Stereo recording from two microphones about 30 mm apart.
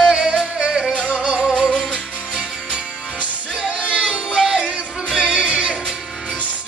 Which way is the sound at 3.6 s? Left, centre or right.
Right.